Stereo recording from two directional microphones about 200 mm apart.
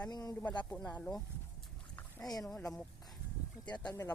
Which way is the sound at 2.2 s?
15° left (ahead or behind).